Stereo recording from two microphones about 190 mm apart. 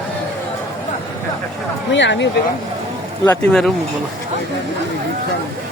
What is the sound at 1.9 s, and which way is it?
Speech, 70° left (ahead or behind).